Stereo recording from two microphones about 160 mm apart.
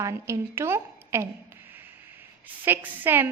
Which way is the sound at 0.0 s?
20° right (ahead or behind).